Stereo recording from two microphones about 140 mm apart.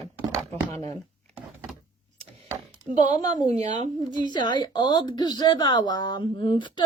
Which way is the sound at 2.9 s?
55° right (ahead or behind).